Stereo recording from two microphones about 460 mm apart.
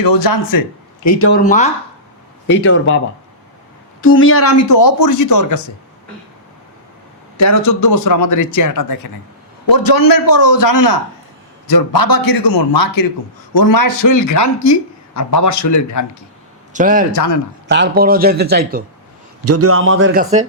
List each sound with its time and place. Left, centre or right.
0.0 s a man's voice: left
1.0 s speech: left
1.3 s speech: centre
4.0 s speech: left
7.3 s a man's voice: left
16.7 s a man's voice: centre
17.1 s speech: left
17.7 s speech: right